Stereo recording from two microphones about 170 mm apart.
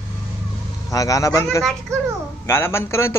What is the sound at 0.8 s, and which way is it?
Speech, 20° left (ahead or behind).